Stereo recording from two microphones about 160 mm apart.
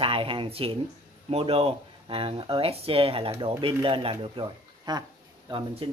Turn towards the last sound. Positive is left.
turn(degrees=-30)  # may be behind; listen again after turning